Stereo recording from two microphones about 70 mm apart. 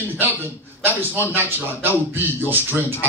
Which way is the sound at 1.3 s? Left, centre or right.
Right.